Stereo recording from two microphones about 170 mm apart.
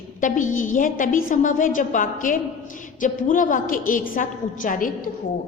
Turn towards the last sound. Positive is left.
turn(degrees=50)  # may be behind; listen again after turning